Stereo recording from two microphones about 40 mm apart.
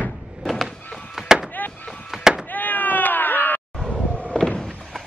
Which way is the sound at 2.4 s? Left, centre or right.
Left.